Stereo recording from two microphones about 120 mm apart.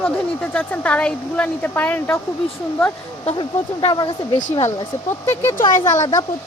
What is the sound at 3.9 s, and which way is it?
Speech, 35° left (ahead or behind).